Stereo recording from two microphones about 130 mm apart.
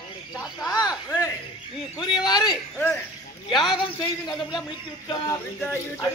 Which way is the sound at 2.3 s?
35° left (ahead or behind).